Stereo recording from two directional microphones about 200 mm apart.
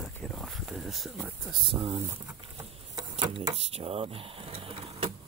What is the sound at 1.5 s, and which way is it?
Speech, 25° right (ahead or behind).